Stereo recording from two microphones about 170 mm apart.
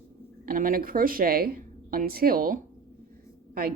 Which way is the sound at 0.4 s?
55° right (ahead or behind).